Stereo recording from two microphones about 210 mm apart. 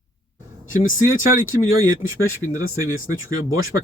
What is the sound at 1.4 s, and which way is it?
Speech, 70° left (ahead or behind).